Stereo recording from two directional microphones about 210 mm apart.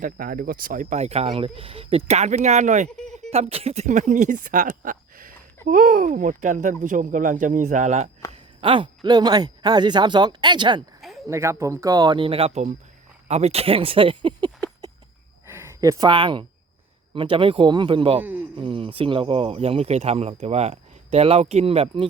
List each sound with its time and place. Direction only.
0.0 s speech: 40° right (ahead or behind)
8.3 s speech: 25° right (ahead or behind)
15.4 s speech: 10° right (ahead or behind)
18.2 s speech: 10° right (ahead or behind)
18.5 s speech: 25° right (ahead or behind)